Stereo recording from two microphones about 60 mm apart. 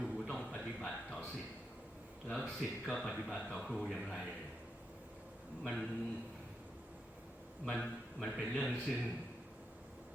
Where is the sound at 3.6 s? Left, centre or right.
Centre.